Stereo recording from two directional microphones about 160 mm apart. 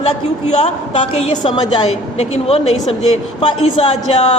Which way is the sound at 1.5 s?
30° left (ahead or behind).